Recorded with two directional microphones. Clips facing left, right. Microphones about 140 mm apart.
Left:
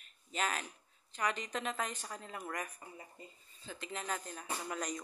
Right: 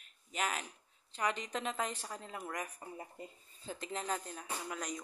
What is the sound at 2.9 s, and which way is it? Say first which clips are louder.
Speech: right 5 dB; 45° right (ahead or behind).